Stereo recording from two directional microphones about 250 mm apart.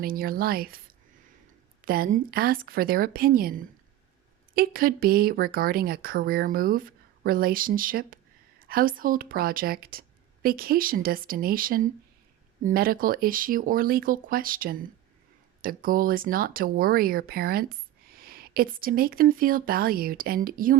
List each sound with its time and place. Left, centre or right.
0.0 s speech: right
1.8 s speech: right